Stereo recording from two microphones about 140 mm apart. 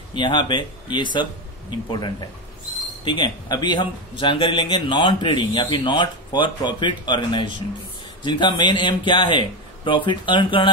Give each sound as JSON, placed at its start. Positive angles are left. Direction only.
{"t": 0.1, "sound": "a man's voice", "side_deg": 35}